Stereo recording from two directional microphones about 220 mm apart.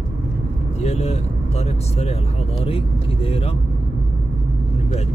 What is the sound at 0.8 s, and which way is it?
Speech, 30° left (ahead or behind).